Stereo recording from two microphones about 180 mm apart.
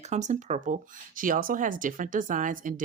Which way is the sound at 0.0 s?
40° right (ahead or behind).